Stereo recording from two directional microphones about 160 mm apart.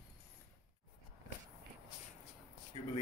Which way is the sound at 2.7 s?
35° left (ahead or behind).